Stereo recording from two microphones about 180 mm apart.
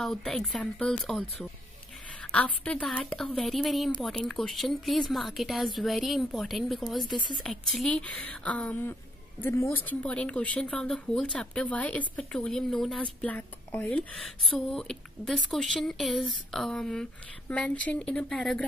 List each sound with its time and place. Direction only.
0.0 s a woman's voice: centre (ahead or behind)
2.3 s a woman's voice: 5° left (ahead or behind)
7.2 s speech: 25° left (ahead or behind)
7.4 s a woman's voice: centre (ahead or behind)